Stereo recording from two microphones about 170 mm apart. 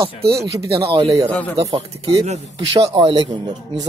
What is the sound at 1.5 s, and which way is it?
Speech, 30° right (ahead or behind).